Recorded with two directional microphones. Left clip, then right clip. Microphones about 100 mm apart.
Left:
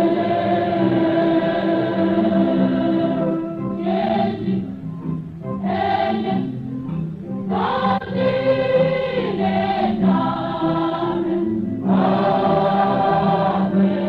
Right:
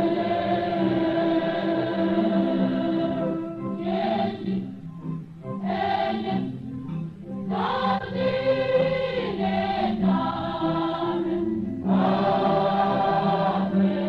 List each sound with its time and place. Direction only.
0.0 s music: 40° right (ahead or behind)
5.7 s music: 35° right (ahead or behind)
7.5 s choir: 35° right (ahead or behind)